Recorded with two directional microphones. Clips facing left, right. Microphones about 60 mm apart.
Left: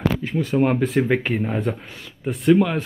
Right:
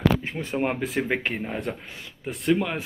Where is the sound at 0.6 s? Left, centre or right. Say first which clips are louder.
Left 7 dB; centre.